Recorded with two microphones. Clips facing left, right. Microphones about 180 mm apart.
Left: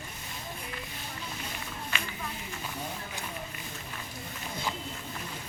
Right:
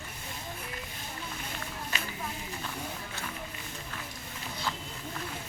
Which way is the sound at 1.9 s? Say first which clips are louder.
Left 1 dB; 40° right (ahead or behind).